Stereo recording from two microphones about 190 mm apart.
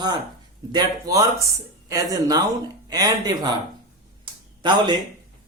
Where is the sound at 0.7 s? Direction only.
20° right (ahead or behind).